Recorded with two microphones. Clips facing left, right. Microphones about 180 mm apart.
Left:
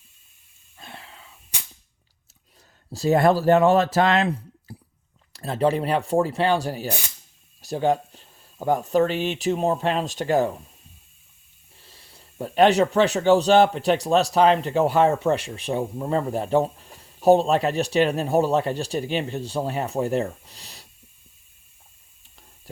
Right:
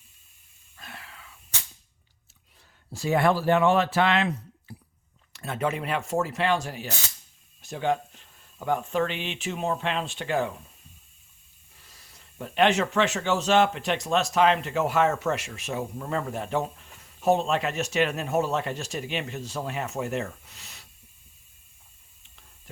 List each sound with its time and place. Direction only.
0.8 s a sound: 25° left (ahead or behind)
2.9 s speech: 40° left (ahead or behind)
11.8 s speech: 30° left (ahead or behind)